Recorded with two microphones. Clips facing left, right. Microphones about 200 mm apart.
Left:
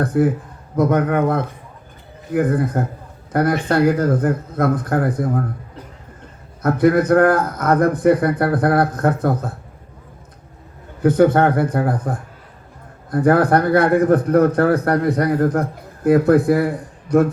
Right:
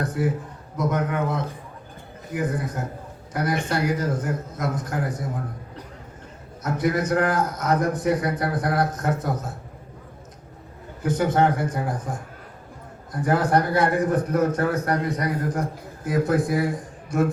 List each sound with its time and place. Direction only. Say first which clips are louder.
0.0 s a man's voice: left 8 dB; 55° left (ahead or behind)
6.6 s a man's voice: left 9 dB; 55° left (ahead or behind)
11.0 s a man's voice: left 7 dB; 55° left (ahead or behind)